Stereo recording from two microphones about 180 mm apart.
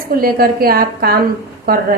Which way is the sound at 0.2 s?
55° right (ahead or behind).